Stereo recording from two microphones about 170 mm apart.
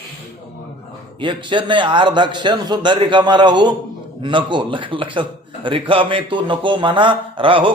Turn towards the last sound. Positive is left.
turn(degrees=-30)  # may be behind; listen again after turning